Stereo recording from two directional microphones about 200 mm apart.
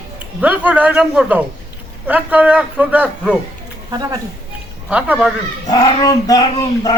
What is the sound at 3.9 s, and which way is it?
Speech, 20° right (ahead or behind).